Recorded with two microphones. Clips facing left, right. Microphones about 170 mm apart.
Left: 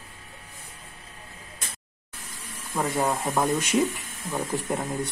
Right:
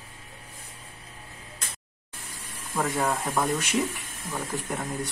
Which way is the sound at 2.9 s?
10° left (ahead or behind).